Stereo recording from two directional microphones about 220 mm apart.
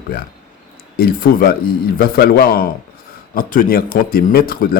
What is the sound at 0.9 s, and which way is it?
A man's voice, 40° left (ahead or behind).